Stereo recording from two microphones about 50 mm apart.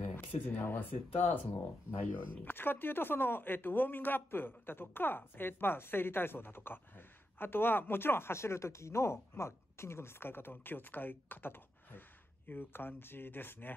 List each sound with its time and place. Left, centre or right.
0.0 s speech: left